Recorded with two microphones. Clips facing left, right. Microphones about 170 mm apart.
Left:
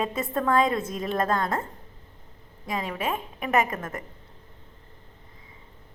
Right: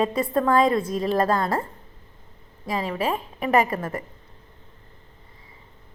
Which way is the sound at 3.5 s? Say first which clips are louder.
Right 4 dB; 30° right (ahead or behind).